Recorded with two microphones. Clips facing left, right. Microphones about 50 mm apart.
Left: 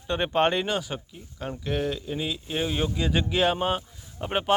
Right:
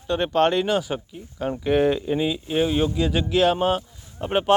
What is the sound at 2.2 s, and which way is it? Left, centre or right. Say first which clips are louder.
Speech: right 7 dB; centre.